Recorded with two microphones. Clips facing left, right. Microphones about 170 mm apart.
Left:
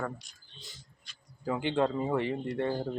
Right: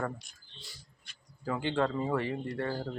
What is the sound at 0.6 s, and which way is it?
A man's voice, 20° left (ahead or behind).